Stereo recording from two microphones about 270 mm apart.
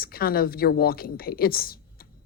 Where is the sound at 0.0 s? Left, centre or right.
Left.